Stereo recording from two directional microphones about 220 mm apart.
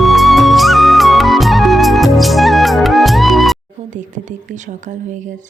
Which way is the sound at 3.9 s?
35° right (ahead or behind).